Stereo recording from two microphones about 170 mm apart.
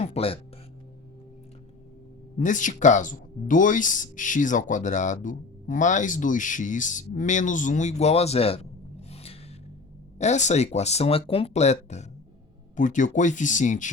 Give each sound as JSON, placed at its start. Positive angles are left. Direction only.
{"t": 0.0, "sound": "music", "side_deg": 35}
{"t": 2.4, "sound": "speech", "side_deg": 50}